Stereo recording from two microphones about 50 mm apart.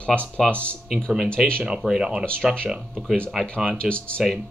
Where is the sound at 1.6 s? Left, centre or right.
Centre.